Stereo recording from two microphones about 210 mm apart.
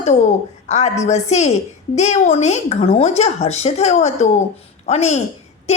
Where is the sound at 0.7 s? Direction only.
35° left (ahead or behind).